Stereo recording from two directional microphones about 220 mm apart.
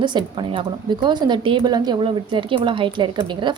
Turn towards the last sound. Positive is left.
turn(degrees=-20)  # may be behind; listen again after turning